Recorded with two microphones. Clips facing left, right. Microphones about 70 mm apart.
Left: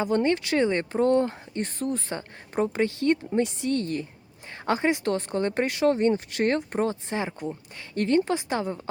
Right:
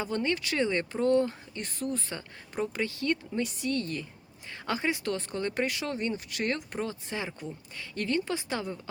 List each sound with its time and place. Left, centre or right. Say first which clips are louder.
0.0 s speech: left 7 dB; left